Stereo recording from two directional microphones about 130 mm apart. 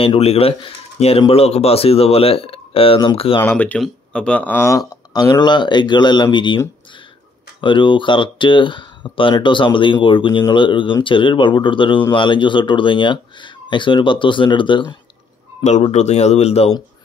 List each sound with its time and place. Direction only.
0.0 s speech: 45° left (ahead or behind)
3.3 s speech: 15° left (ahead or behind); by 6.6 s 35° left (ahead or behind)
7.6 s speech: 40° left (ahead or behind)
15.6 s speech: 60° left (ahead or behind)